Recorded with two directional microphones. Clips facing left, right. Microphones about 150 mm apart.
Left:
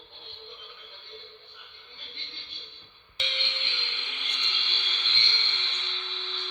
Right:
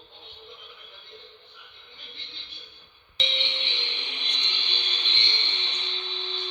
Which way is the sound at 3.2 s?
15° right (ahead or behind).